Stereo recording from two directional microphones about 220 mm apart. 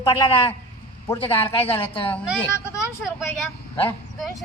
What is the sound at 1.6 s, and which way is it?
Speech, 25° left (ahead or behind).